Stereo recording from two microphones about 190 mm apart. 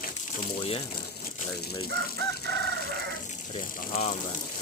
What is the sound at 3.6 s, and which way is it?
Speech, 40° left (ahead or behind).